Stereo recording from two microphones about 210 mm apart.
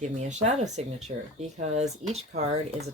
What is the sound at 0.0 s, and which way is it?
Speech, 35° right (ahead or behind).